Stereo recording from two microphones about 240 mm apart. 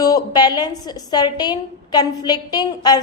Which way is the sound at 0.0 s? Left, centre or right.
Centre.